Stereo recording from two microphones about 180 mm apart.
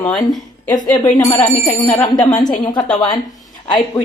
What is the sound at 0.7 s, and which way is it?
Speech, 25° left (ahead or behind).